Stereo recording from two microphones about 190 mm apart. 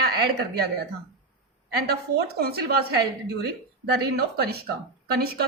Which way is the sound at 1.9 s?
55° right (ahead or behind).